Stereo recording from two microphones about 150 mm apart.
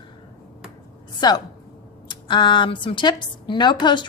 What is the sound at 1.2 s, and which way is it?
A woman's voice, 25° left (ahead or behind).